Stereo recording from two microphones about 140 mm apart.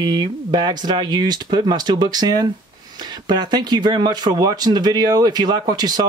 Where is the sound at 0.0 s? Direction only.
30° right (ahead or behind).